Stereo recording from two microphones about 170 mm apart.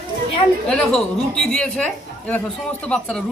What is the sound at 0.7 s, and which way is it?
Speech, 5° left (ahead or behind).